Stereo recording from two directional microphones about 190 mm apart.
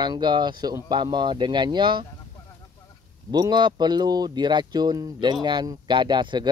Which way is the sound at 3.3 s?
20° right (ahead or behind).